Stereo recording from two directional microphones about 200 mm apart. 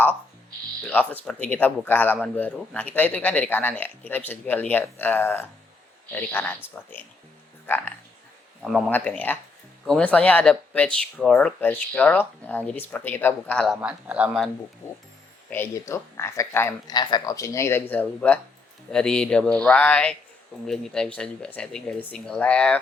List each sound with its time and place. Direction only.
0.8 s a man's voice: 10° left (ahead or behind)
8.6 s a man's voice: 5° left (ahead or behind)
15.4 s a man's voice: 10° left (ahead or behind)